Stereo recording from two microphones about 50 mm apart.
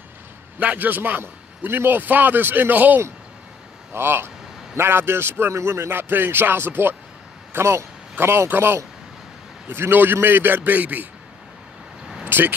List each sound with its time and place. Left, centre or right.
0.6 s a man's voice: right
3.9 s speech: right
5.5 s speech: right
7.5 s speech: right
12.3 s speech: right